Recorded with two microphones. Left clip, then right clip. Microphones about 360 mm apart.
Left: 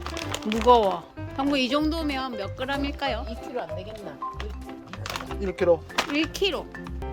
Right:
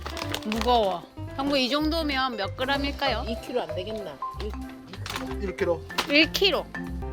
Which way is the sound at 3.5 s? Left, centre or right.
Right.